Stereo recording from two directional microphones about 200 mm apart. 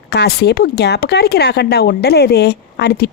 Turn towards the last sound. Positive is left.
turn(degrees=55)  # may be behind; listen again after turning